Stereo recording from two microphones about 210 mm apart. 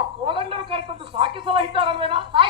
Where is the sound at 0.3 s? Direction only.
25° right (ahead or behind).